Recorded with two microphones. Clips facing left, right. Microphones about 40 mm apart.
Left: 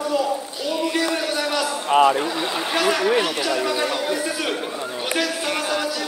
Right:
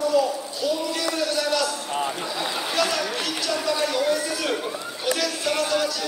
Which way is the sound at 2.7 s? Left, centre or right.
Left.